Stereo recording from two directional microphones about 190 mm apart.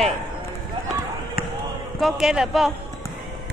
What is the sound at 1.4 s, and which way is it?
Basketball bounce, 50° left (ahead or behind).